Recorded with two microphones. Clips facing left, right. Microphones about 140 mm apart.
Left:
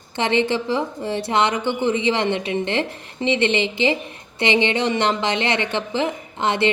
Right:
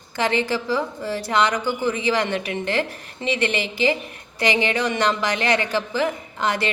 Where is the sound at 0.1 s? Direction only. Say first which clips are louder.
Left 2 dB; 25° left (ahead or behind).